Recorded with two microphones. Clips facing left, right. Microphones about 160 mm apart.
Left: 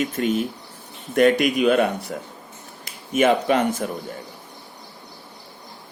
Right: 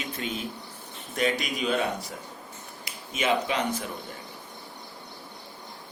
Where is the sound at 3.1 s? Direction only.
50° left (ahead or behind).